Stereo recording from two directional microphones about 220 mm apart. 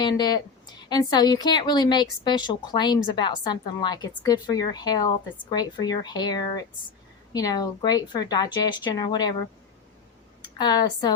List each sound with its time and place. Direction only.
0.0 s a woman's voice: 20° left (ahead or behind)
10.6 s a woman's voice: 20° left (ahead or behind)